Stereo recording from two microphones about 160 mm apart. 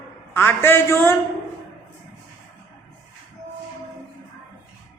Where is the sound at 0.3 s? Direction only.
15° left (ahead or behind).